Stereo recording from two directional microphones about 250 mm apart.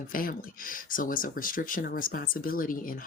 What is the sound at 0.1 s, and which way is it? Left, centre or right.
Speech, left.